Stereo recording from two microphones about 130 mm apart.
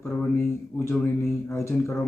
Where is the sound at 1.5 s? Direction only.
20° left (ahead or behind).